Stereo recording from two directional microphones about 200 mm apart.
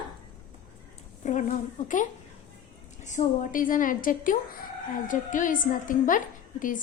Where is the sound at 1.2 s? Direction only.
35° left (ahead or behind).